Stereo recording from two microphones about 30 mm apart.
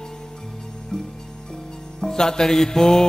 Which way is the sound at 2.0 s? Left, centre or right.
Left.